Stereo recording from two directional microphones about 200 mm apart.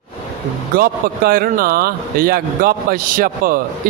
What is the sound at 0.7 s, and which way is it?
A man's voice, 50° right (ahead or behind).